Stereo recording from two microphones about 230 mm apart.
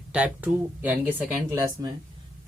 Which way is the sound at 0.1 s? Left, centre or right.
Centre.